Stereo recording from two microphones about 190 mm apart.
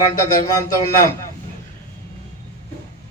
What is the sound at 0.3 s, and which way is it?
Speech, 20° left (ahead or behind).